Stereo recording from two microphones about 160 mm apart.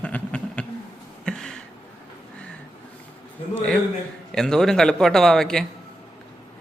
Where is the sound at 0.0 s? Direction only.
10° left (ahead or behind).